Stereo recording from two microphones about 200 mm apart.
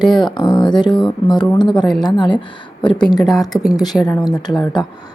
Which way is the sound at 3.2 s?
Centre (ahead or behind).